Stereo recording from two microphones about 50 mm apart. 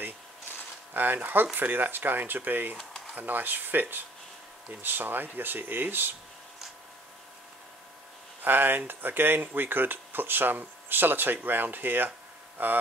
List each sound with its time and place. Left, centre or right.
0.9 s speech: right
8.4 s speech: right